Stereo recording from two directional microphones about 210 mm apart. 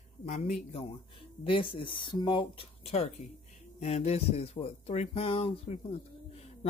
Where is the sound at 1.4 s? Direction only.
25° left (ahead or behind).